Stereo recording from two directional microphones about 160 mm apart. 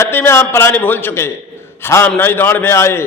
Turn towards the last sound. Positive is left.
turn(degrees=15)  # may be behind; listen again after turning